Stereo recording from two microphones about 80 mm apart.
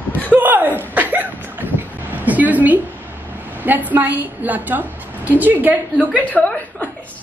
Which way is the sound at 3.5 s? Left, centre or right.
Right.